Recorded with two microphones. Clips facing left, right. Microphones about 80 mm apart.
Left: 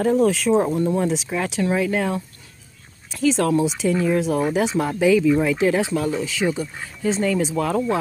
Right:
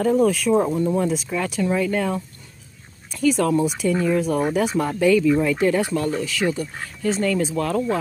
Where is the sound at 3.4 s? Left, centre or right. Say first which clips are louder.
Left 1 dB; centre.